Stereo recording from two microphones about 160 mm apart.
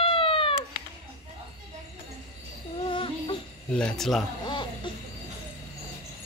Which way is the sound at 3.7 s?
5° left (ahead or behind).